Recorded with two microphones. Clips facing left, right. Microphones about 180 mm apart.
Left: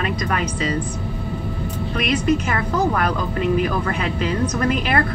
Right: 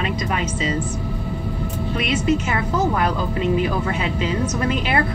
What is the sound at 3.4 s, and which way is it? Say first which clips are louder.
Speech: left 1 dB; 50° left (ahead or behind).